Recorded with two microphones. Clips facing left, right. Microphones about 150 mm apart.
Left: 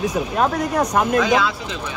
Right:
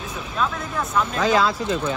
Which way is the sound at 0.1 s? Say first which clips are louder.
Left 6 dB; 45° left (ahead or behind).